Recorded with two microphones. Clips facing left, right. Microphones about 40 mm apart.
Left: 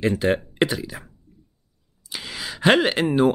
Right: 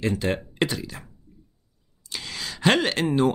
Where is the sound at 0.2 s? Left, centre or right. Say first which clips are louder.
Left 4 dB; centre.